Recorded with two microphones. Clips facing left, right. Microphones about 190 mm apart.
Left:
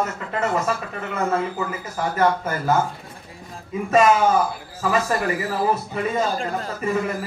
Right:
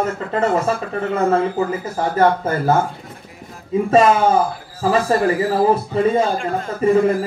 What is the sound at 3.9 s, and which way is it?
A man's voice, 30° right (ahead or behind).